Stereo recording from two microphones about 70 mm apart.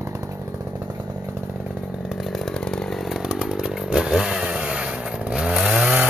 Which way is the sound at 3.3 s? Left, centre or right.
Centre.